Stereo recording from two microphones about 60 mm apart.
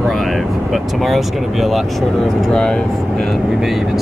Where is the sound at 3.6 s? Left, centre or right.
Centre.